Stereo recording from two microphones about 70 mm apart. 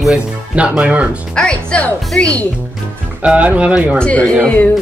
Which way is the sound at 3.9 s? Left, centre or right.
Centre.